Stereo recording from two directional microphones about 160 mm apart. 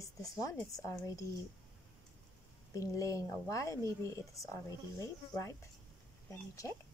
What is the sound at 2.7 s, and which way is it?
Speech, 20° left (ahead or behind).